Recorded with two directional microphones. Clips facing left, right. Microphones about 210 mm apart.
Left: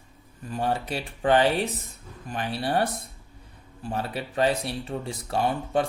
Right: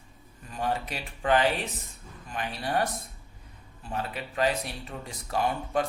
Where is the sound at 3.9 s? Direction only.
30° left (ahead or behind).